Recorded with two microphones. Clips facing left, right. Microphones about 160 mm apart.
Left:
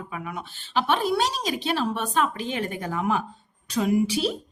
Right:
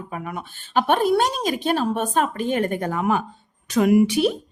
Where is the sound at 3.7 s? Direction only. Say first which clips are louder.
Right 6 dB; 70° right (ahead or behind).